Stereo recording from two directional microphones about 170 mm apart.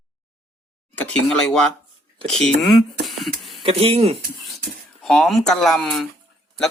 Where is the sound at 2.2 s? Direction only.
Centre (ahead or behind).